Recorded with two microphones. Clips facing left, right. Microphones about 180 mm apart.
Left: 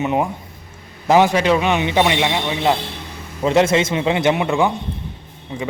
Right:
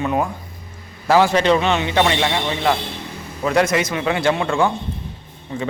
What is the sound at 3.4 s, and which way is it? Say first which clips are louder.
A man's voice: left 3 dB; 25° left (ahead or behind).